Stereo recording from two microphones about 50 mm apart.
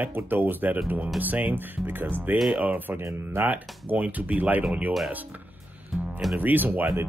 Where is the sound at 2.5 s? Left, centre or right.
Right.